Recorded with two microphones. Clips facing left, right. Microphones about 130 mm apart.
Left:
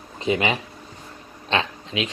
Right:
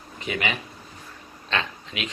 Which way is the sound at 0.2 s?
25° left (ahead or behind).